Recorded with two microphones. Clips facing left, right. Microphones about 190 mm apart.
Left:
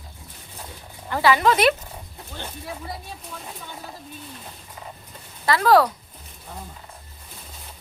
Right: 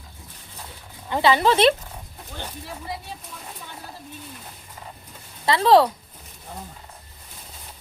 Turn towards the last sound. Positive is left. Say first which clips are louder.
# right 1 dB
turn(degrees=-25)  # may be behind; listen again after turning